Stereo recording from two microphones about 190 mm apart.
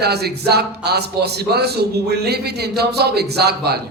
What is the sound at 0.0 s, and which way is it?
A man's voice, 55° right (ahead or behind).